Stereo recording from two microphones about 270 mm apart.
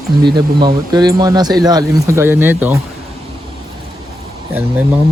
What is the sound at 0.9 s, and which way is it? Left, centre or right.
Speech, centre.